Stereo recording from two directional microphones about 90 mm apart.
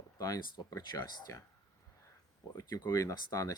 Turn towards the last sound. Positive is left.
turn(degrees=40)  # may be behind; listen again after turning